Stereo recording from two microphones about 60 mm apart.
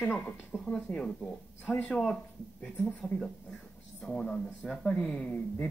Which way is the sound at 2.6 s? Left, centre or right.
Centre.